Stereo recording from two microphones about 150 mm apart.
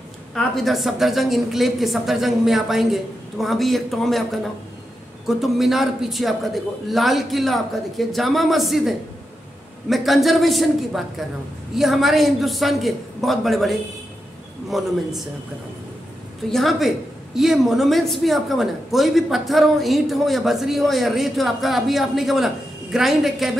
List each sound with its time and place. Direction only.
0.3 s a woman's voice: centre (ahead or behind)
16.4 s a woman's voice: centre (ahead or behind)